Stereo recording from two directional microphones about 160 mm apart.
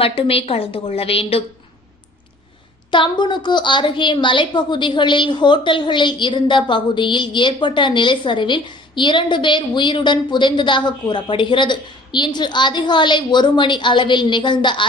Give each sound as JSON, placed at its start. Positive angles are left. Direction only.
{"t": 0.0, "sound": "a woman's voice", "side_deg": 35}
{"t": 2.9, "sound": "a woman's voice", "side_deg": 30}